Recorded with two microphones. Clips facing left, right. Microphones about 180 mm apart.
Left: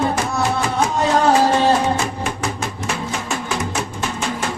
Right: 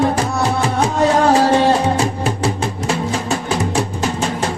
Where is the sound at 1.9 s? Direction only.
35° right (ahead or behind).